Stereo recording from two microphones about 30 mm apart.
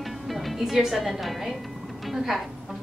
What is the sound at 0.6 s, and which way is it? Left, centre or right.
Speech, centre.